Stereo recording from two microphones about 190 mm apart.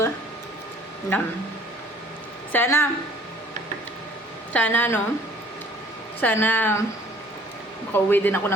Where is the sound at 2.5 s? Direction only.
10° left (ahead or behind).